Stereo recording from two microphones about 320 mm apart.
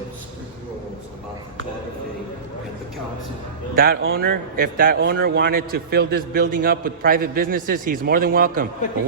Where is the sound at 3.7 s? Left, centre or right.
Right.